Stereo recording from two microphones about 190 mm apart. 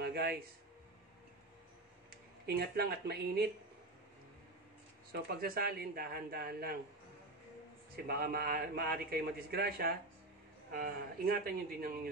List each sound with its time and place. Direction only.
0.0 s a man's voice: 55° right (ahead or behind)
2.0 s speech: 55° right (ahead or behind)
5.1 s a man's voice: 55° right (ahead or behind)
7.9 s a man's voice: 55° right (ahead or behind)